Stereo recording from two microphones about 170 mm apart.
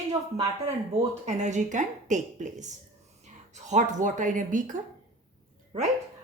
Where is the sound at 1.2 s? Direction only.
45° right (ahead or behind).